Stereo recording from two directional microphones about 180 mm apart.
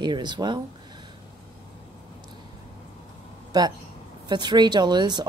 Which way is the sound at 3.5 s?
25° right (ahead or behind).